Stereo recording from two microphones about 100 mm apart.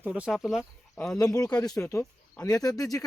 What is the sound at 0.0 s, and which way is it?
Speech, 10° right (ahead or behind).